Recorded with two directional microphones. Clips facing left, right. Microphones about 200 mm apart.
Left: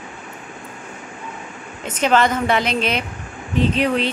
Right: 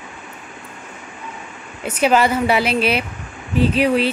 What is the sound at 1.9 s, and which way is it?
Speech, 10° right (ahead or behind).